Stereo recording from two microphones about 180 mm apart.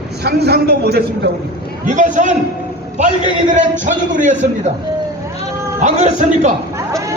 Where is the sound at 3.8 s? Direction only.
45° right (ahead or behind).